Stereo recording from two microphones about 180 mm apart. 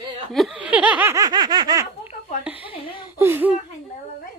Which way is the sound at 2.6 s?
30° left (ahead or behind).